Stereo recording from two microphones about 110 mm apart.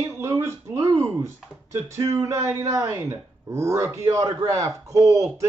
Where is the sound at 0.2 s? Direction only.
25° right (ahead or behind).